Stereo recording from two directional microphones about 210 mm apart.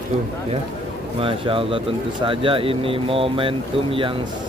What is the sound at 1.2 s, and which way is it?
Speech, 25° right (ahead or behind).